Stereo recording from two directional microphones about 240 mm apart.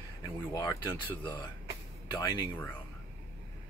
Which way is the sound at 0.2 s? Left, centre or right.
Centre.